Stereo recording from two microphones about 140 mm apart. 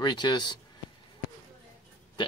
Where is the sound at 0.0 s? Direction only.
35° left (ahead or behind).